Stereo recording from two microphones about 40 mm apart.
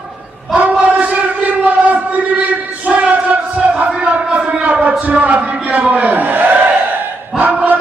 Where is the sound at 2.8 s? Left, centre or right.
Right.